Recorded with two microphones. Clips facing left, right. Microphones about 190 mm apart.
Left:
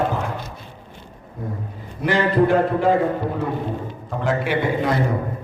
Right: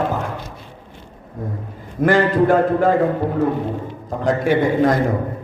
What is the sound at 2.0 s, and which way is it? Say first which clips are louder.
Speech: right 3 dB; 50° right (ahead or behind).